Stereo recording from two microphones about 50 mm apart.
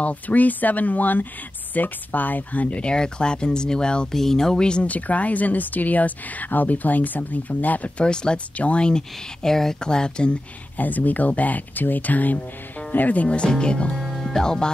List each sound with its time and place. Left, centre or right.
0.0 s speech: left
4.8 s speech: left
8.0 s speech: centre
10.8 s speech: left
14.0 s music: centre
14.4 s speech: centre